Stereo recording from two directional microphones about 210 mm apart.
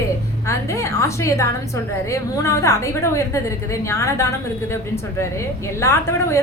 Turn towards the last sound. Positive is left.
turn(degrees=15)  # may be behind; listen again after turning